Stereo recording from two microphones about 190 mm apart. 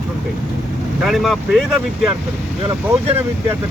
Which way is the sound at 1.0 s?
Centre (ahead or behind).